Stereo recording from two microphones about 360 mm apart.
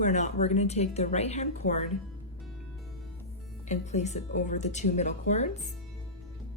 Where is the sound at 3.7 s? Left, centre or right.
Centre.